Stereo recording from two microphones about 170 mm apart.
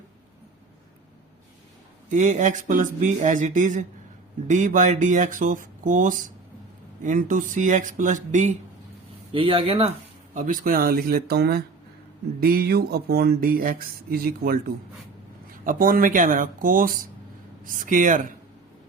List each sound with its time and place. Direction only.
2.0 s speech: 45° right (ahead or behind)
9.3 s speech: 30° right (ahead or behind)
10.3 s speech: 55° right (ahead or behind)
15.6 s speech: 55° right (ahead or behind)